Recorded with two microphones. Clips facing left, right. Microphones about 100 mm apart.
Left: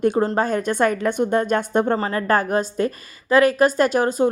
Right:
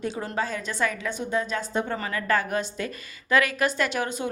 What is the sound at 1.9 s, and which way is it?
A woman's voice, 35° left (ahead or behind).